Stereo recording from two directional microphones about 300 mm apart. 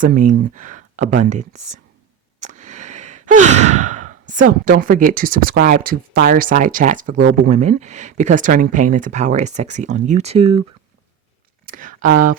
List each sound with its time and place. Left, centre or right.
0.0 s speech: right
2.6 s speech: right
11.6 s speech: right